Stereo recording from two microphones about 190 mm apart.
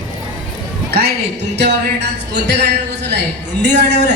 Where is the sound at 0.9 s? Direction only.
60° right (ahead or behind).